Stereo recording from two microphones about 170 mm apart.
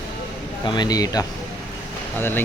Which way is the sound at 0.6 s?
25° left (ahead or behind).